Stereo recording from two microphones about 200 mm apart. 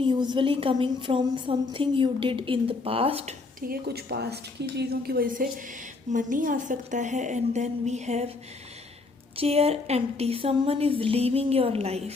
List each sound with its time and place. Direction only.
0.0 s a woman's voice: 25° right (ahead or behind)
3.7 s a woman's voice: 55° right (ahead or behind); by 8.3 s 35° right (ahead or behind)
9.3 s a woman's voice: 30° right (ahead or behind)